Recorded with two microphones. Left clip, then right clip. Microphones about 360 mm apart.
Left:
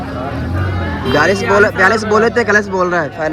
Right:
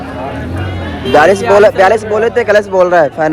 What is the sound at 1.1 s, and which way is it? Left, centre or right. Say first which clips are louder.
Speech: right 6 dB; right.